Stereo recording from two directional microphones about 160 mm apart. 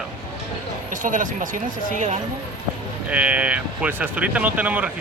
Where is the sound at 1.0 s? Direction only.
55° right (ahead or behind).